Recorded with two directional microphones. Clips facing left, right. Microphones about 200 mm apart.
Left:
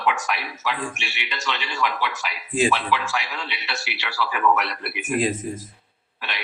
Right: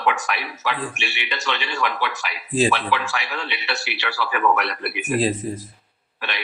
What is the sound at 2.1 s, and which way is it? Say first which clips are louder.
Speech: right 2 dB; 35° right (ahead or behind).